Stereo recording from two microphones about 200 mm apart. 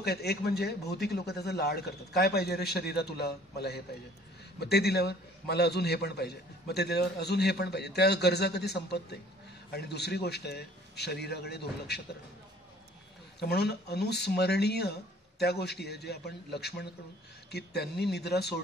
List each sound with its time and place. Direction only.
0.0 s a man's voice: 55° left (ahead or behind)
13.4 s a man's voice: 55° left (ahead or behind)